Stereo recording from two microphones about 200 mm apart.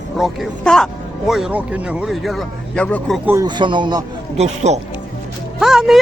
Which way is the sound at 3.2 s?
15° right (ahead or behind).